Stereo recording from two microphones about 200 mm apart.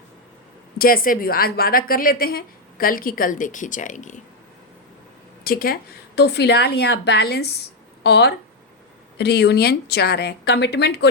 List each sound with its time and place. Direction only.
0.8 s a woman's voice: 45° left (ahead or behind)
5.4 s speech: 50° left (ahead or behind)